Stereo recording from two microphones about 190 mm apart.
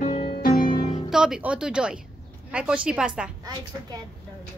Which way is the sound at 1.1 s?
5° right (ahead or behind).